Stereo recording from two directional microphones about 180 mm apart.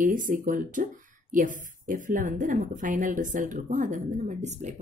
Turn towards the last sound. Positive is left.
turn(degrees=-40)  # may be behind; listen again after turning